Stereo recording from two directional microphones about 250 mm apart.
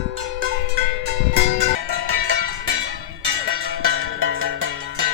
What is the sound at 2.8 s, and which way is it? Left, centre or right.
Bell, right.